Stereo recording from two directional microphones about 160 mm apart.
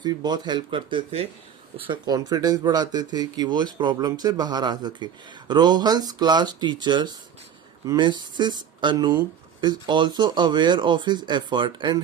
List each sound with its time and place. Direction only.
0.0 s speech: 25° right (ahead or behind)